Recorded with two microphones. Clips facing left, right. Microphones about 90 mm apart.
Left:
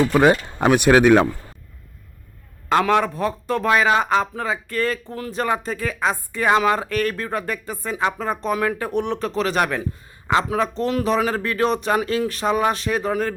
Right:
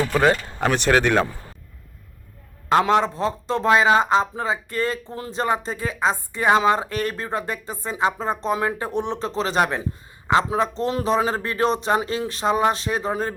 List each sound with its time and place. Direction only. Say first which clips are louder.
0.1 s speech: left 3 dB; 15° left (ahead or behind)
2.7 s a man's voice: even; 25° right (ahead or behind)